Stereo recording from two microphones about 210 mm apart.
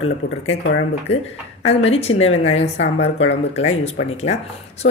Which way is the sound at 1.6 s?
30° left (ahead or behind).